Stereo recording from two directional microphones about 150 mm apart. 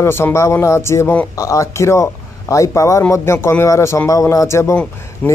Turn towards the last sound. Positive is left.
turn(degrees=10)  # may be behind; listen again after turning